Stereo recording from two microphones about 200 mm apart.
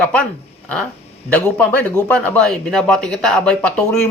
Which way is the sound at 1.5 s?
5° left (ahead or behind).